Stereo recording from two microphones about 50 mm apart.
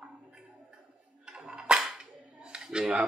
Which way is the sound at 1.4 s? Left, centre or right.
Right.